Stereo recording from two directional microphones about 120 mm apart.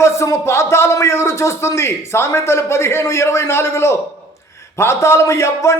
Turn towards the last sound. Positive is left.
turn(degrees=25)  # may be behind; listen again after turning